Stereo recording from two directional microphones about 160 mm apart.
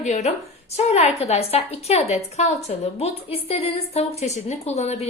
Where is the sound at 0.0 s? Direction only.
45° left (ahead or behind).